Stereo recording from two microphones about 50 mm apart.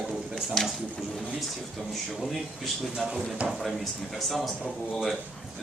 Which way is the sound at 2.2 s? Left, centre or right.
Centre.